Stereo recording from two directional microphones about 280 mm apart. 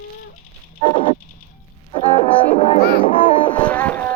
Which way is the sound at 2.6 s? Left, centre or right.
Left.